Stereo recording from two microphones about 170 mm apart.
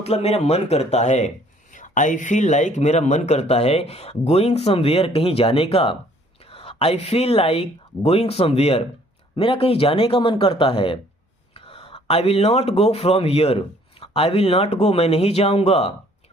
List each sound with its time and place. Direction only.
0.0 s speech: 35° left (ahead or behind)